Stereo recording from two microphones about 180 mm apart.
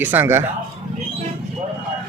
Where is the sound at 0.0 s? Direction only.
10° right (ahead or behind).